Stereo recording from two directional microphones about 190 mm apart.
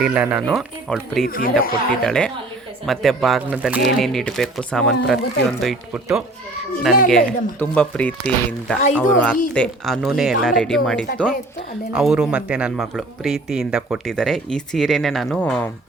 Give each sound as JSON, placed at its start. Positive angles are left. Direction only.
{"t": 0.0, "sound": "speech", "side_deg": -10}
{"t": 1.3, "sound": "speech", "side_deg": 50}
{"t": 2.0, "sound": "speech", "side_deg": 5}